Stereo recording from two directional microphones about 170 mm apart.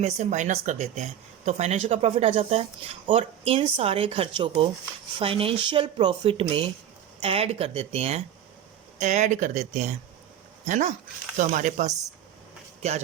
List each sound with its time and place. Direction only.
0.0 s speech: 45° right (ahead or behind)